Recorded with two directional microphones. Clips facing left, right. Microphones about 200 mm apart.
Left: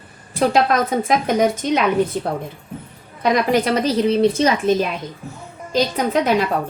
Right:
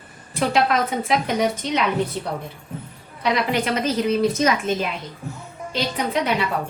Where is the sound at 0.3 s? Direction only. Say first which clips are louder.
Left 3 dB; 40° left (ahead or behind).